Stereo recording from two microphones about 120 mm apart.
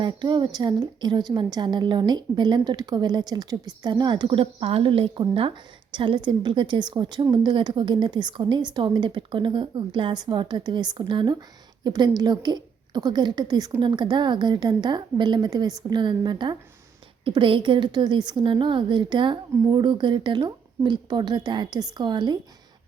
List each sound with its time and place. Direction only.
0.0 s a woman's voice: 40° right (ahead or behind)